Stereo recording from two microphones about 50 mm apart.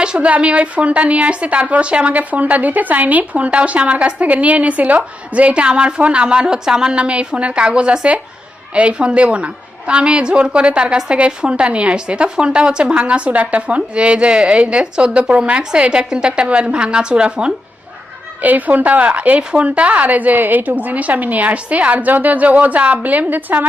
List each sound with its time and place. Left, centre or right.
0.0 s a woman's voice: right
18.4 s a woman's voice: right